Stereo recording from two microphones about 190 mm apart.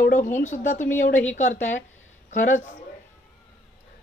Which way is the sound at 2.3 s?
40° left (ahead or behind).